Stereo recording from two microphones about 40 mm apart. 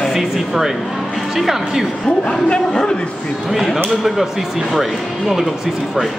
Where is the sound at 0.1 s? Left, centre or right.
Centre.